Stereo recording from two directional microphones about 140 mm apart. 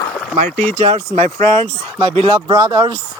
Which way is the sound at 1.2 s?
55° right (ahead or behind).